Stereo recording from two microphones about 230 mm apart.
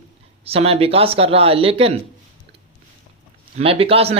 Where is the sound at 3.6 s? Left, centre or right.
Right.